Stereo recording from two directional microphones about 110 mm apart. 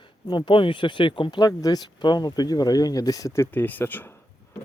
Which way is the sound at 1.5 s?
30° left (ahead or behind).